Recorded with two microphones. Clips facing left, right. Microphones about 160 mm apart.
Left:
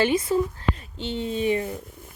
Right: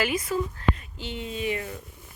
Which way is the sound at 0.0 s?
30° left (ahead or behind).